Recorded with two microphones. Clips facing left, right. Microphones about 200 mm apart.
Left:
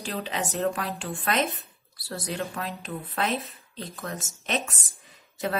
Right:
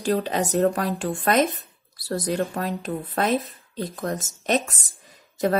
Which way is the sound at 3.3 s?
Centre (ahead or behind).